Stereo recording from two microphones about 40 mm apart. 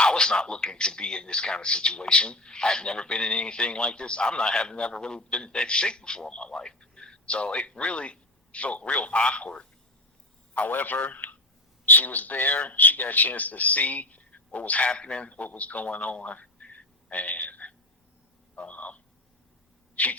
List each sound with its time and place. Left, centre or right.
0.0 s a man's voice: left
10.7 s a man's voice: left
18.5 s a sound: left
20.0 s speech: left